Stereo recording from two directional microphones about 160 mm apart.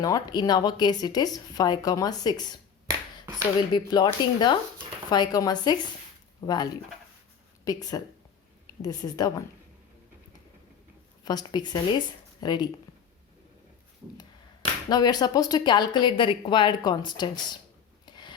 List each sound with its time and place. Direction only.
0.0 s a woman's voice: 25° left (ahead or behind)
3.7 s a woman's voice: 30° left (ahead or behind)
11.3 s a woman's voice: 25° left (ahead or behind)
14.8 s a woman's voice: 25° left (ahead or behind)
18.0 s rub: 30° left (ahead or behind)